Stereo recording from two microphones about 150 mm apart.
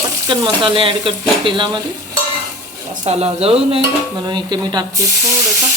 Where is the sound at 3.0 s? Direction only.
45° right (ahead or behind).